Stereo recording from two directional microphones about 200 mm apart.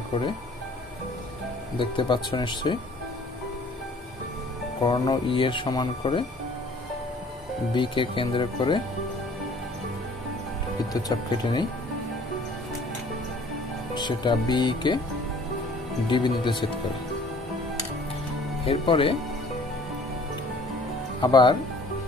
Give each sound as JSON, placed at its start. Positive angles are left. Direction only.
{"t": 1.8, "sound": "speech", "side_deg": 25}
{"t": 4.8, "sound": "speech", "side_deg": 20}
{"t": 7.7, "sound": "speech", "side_deg": 25}
{"t": 10.9, "sound": "speech", "side_deg": 20}
{"t": 13.9, "sound": "speech", "side_deg": 20}
{"t": 16.1, "sound": "speech", "side_deg": 25}
{"t": 18.7, "sound": "speech", "side_deg": 25}
{"t": 21.2, "sound": "speech", "side_deg": 20}